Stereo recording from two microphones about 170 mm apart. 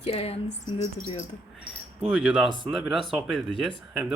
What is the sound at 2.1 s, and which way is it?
Speech, 5° right (ahead or behind).